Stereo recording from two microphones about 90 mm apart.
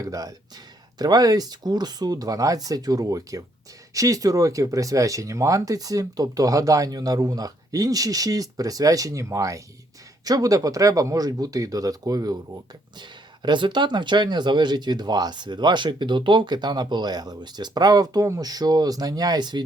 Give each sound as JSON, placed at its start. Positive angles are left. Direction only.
{"t": 0.0, "sound": "speech", "side_deg": -40}
{"t": 13.0, "sound": "speech", "side_deg": -55}